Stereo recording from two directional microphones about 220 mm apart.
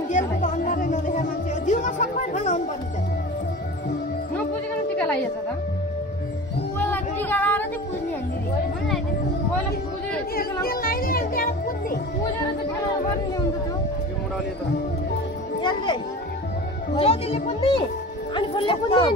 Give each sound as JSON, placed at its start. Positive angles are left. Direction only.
{"t": 0.1, "sound": "music", "side_deg": 35}
{"t": 1.7, "sound": "chatter", "side_deg": 35}
{"t": 6.8, "sound": "a sound", "side_deg": 10}
{"t": 10.3, "sound": "music", "side_deg": 45}
{"t": 15.6, "sound": "children playing", "side_deg": 20}
{"t": 16.9, "sound": "a child's voice", "side_deg": 25}
{"t": 18.3, "sound": "a sound", "side_deg": 25}